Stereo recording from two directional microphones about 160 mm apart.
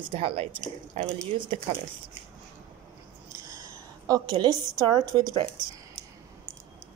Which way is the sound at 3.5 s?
20° right (ahead or behind).